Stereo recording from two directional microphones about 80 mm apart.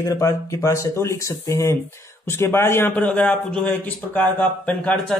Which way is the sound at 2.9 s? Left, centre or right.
Centre.